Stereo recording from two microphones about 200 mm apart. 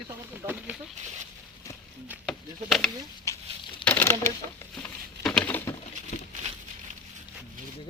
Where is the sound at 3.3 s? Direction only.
15° left (ahead or behind).